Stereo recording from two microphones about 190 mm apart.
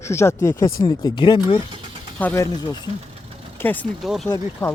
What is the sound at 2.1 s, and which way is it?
A man's voice, 10° left (ahead or behind).